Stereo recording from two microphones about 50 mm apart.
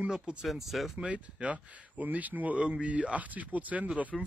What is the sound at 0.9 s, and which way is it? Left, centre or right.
Speech, right.